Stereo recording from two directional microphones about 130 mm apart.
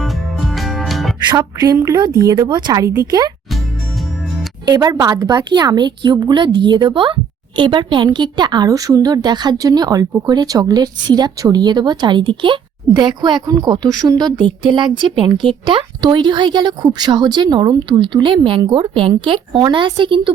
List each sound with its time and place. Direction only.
0.0 s music: centre (ahead or behind)
1.3 s a woman's voice: 30° right (ahead or behind)
4.7 s a woman's voice: 30° right (ahead or behind)